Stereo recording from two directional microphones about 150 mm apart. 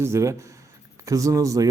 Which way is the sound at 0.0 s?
20° right (ahead or behind).